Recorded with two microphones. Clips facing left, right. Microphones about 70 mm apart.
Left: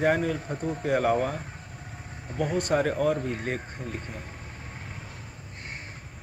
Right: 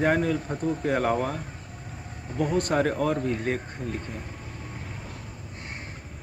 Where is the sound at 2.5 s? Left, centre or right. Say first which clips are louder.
Right 1 dB; right.